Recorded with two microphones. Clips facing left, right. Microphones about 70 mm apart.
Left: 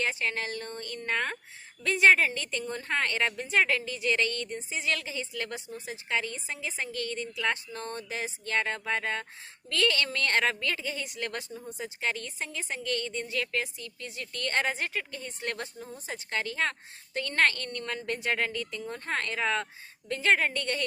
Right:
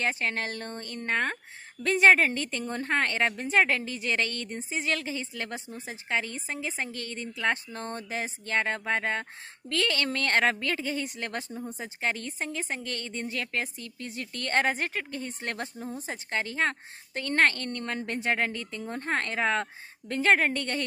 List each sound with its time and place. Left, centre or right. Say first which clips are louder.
0.0 s speech: right 1 dB; right